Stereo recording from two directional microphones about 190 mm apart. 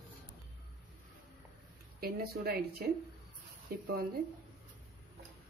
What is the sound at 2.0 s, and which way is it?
Speech, 55° right (ahead or behind).